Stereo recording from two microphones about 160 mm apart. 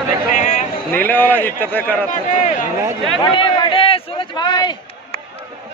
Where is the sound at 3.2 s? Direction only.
30° left (ahead or behind).